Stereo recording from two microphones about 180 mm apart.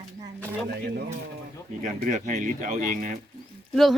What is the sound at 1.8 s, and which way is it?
Speech, 45° right (ahead or behind).